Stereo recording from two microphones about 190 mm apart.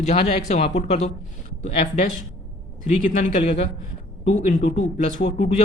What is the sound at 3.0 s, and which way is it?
Speech, 45° left (ahead or behind).